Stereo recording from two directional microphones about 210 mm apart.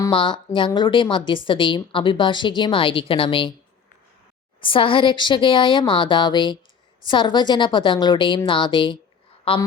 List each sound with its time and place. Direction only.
0.0 s a woman's voice: 25° left (ahead or behind)
4.6 s a woman's voice: 25° left (ahead or behind)